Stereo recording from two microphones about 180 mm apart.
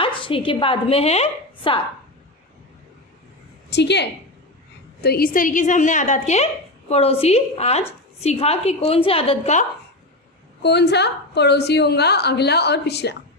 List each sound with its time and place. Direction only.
0.0 s a woman's voice: 30° left (ahead or behind)
3.7 s a woman's voice: 70° left (ahead or behind)
5.0 s a woman's voice: 55° left (ahead or behind); by 9.7 s 35° left (ahead or behind)
10.6 s a woman's voice: 70° left (ahead or behind)